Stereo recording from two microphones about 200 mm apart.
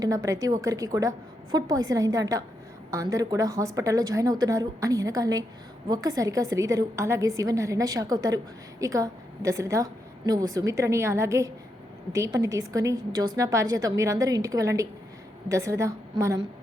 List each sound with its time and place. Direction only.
0.0 s a woman's voice: 15° right (ahead or behind)